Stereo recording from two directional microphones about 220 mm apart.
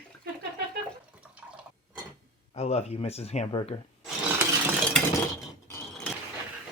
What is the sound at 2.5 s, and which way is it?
Speech, 30° left (ahead or behind).